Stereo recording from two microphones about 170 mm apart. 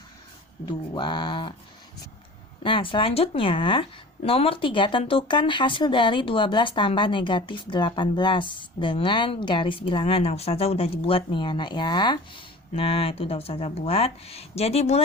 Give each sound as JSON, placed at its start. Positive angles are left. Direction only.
{"t": 0.6, "sound": "speech", "side_deg": 25}
{"t": 2.6, "sound": "speech", "side_deg": 30}